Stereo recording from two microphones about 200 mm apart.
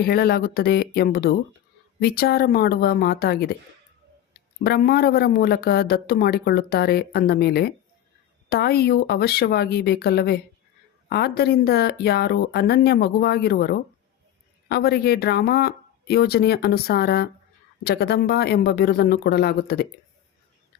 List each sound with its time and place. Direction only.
0.0 s speech: 50° left (ahead or behind)
4.6 s speech: 50° left (ahead or behind)